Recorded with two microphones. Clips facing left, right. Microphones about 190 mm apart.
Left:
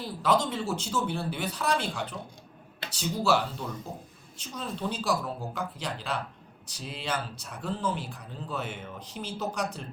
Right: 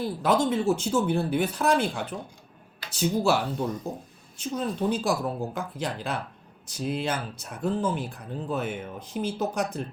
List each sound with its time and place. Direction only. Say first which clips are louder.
0.0 s speech: right 3 dB; 50° right (ahead or behind)